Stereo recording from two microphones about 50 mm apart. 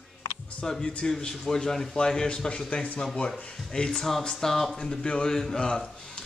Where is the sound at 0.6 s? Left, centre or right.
Centre.